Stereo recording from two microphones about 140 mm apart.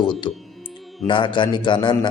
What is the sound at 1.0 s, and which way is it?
Speech, 35° left (ahead or behind).